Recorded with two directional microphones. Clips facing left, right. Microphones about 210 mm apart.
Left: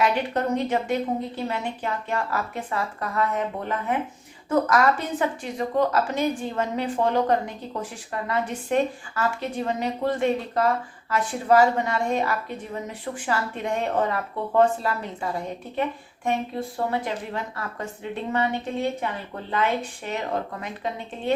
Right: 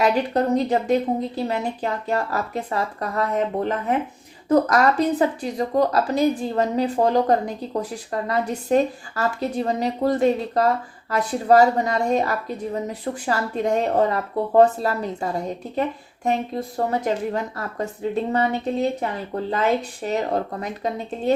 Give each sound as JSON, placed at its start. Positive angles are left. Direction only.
{"t": 0.0, "sound": "a woman's voice", "side_deg": -35}